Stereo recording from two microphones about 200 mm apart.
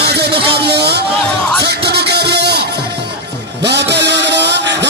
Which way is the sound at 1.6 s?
55° right (ahead or behind).